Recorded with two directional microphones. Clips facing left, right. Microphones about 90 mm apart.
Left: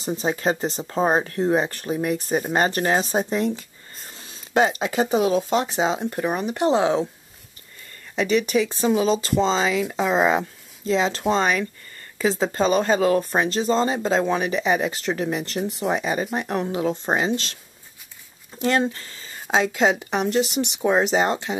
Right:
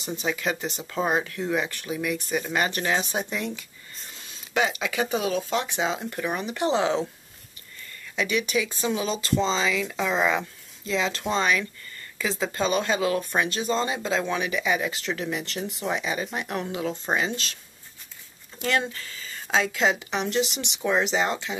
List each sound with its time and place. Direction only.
0.0 s speech: 35° left (ahead or behind)
4.1 s a sound: 35° left (ahead or behind)
5.5 s speech: 35° left (ahead or behind)
8.2 s speech: 40° left (ahead or behind)
18.6 s speech: 30° left (ahead or behind)